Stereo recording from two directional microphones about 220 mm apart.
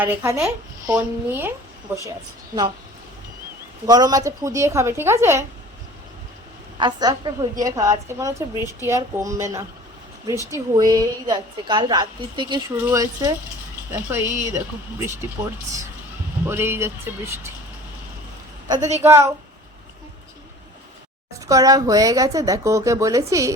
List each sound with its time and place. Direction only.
0.0 s speech: 10° right (ahead or behind)
3.8 s speech: 15° right (ahead or behind)
6.7 s a woman's voice: 20° right (ahead or behind)
16.5 s speech: 10° right (ahead or behind)
18.8 s a woman's voice: 30° right (ahead or behind)
19.0 s speech: 10° right (ahead or behind)
21.4 s speech: 15° right (ahead or behind)